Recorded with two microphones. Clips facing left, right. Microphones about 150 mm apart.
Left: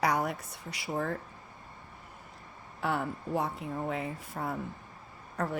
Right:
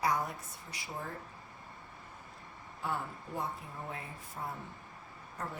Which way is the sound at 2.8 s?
75° left (ahead or behind).